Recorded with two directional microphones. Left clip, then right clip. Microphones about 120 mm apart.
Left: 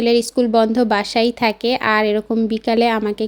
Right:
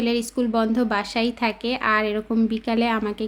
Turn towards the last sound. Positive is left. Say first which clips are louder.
# left 7 dB
turn(degrees=45)  # may be behind; listen again after turning